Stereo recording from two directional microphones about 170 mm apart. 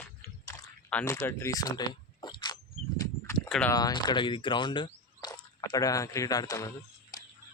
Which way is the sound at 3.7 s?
25° left (ahead or behind).